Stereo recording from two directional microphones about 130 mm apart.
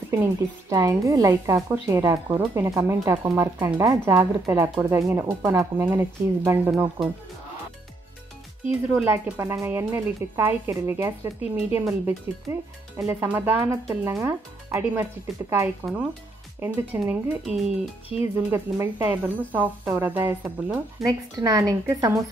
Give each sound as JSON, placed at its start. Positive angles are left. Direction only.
{"t": 0.1, "sound": "speech", "side_deg": -25}
{"t": 8.9, "sound": "speech", "side_deg": -20}
{"t": 15.3, "sound": "speech", "side_deg": 0}
{"t": 16.5, "sound": "speech", "side_deg": -15}
{"t": 18.2, "sound": "speech", "side_deg": -20}
{"t": 21.0, "sound": "speech", "side_deg": -30}